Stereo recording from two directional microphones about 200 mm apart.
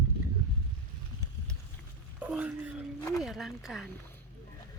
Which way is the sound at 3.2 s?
Centre (ahead or behind).